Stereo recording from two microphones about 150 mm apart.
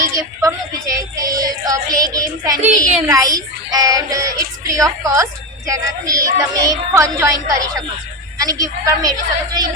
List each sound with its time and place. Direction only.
0.0 s a woman's voice: 20° right (ahead or behind)
2.6 s speech: 55° right (ahead or behind)
3.1 s speech: 25° right (ahead or behind)